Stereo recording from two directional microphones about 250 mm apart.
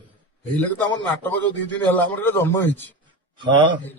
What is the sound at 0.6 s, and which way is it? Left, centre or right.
A man's voice, centre.